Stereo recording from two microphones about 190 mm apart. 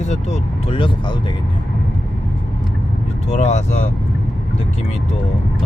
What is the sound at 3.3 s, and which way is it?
Speech, 35° left (ahead or behind).